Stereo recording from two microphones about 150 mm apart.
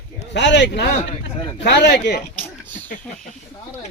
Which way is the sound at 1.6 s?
90° left.